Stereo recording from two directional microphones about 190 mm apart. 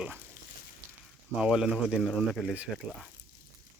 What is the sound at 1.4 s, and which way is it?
Speech, 5° right (ahead or behind).